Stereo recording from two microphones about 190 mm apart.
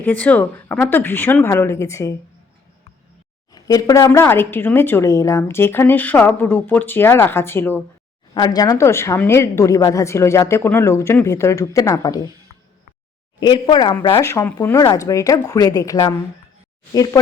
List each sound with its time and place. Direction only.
0.0 s speech: 5° left (ahead or behind)
3.5 s speech: 20° left (ahead or behind)
13.4 s speech: 25° left (ahead or behind)